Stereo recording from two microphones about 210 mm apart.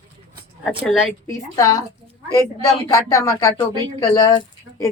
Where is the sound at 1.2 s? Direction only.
15° left (ahead or behind).